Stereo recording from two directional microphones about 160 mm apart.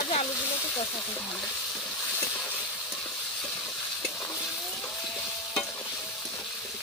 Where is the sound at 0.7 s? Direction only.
10° left (ahead or behind).